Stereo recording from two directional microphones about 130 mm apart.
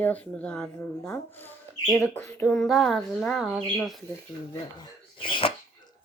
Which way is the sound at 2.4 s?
5° left (ahead or behind).